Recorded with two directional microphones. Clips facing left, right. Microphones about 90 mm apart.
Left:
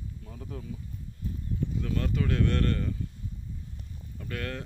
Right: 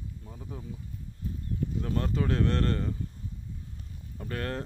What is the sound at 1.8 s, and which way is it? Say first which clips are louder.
Speech: right 1 dB; 35° right (ahead or behind).